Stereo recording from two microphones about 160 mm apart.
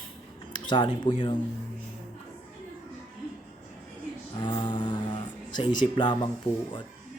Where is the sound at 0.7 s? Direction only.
30° left (ahead or behind).